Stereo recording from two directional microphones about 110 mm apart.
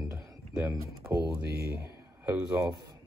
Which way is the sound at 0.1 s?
30° right (ahead or behind).